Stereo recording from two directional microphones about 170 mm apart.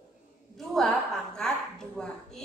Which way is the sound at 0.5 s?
Centre (ahead or behind).